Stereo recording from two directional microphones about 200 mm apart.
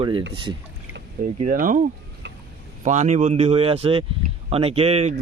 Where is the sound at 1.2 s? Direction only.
40° right (ahead or behind).